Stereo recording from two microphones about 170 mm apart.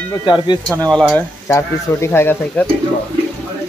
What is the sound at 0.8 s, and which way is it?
Speech, 5° left (ahead or behind).